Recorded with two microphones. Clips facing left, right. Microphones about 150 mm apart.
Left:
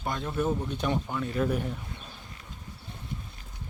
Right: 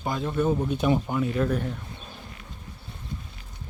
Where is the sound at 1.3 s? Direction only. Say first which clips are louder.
Right 2 dB; 5° left (ahead or behind).